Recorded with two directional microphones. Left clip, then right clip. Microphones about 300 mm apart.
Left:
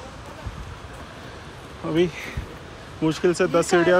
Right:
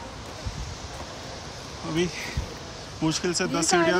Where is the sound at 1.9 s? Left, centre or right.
Centre.